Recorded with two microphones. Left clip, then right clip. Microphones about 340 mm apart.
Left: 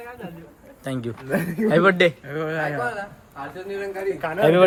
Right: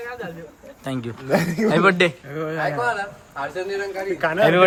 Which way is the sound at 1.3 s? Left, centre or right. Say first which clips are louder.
Right 4 dB; right.